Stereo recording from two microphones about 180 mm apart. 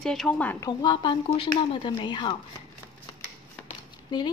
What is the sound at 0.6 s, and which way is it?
Speech, 25° left (ahead or behind).